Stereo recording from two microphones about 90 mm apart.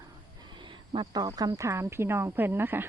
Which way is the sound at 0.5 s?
65° right (ahead or behind).